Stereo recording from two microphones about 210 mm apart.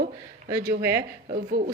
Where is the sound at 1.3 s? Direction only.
40° right (ahead or behind).